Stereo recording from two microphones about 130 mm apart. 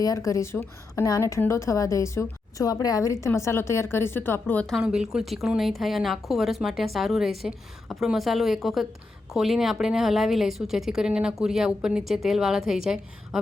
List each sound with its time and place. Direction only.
0.0 s a woman's voice: 25° left (ahead or behind)
4.6 s a woman's voice: centre (ahead or behind)